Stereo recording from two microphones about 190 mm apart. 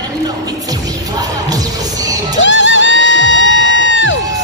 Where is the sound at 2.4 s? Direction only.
80° left.